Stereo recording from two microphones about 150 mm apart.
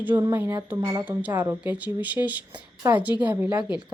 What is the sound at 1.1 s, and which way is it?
Speech, 10° right (ahead or behind).